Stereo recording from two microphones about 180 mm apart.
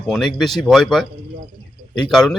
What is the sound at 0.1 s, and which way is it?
Speech, centre (ahead or behind).